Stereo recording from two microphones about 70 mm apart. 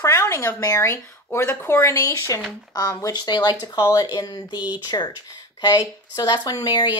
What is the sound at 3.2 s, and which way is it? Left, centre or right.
Speech, left.